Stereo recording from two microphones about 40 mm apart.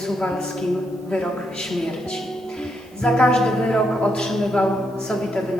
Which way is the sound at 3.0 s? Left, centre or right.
Centre.